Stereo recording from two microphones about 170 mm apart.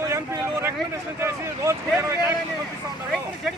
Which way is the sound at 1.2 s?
15° right (ahead or behind).